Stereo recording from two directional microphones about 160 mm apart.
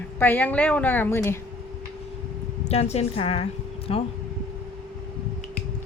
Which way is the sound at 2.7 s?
40° left (ahead or behind).